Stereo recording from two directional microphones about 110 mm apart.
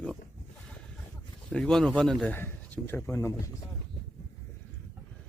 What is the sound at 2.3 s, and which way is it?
Speech, 20° left (ahead or behind).